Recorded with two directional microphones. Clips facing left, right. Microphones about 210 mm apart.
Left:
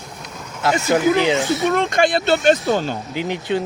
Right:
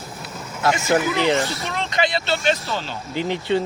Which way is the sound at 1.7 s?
50° left (ahead or behind).